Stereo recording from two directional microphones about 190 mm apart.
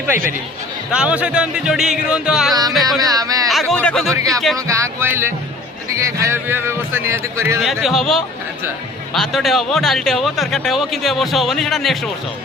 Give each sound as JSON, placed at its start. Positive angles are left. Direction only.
{"t": 0.9, "sound": "speech", "side_deg": -5}
{"t": 3.0, "sound": "speech", "side_deg": -20}
{"t": 3.5, "sound": "speech", "side_deg": 0}
{"t": 4.1, "sound": "speech", "side_deg": -15}
{"t": 7.6, "sound": "speech", "side_deg": 0}